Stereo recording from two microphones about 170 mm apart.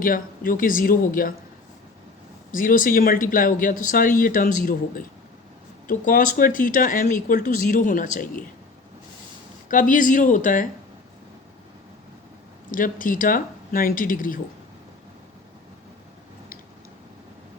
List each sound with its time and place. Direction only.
0.0 s speech: 55° left (ahead or behind)
2.5 s speech: 55° left (ahead or behind)
9.6 s speech: 50° left (ahead or behind)
12.7 s speech: 55° left (ahead or behind)